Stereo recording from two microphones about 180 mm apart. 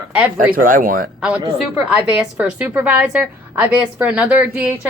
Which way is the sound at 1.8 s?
5° right (ahead or behind).